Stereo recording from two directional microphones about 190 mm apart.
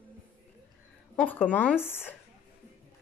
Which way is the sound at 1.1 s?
10° left (ahead or behind).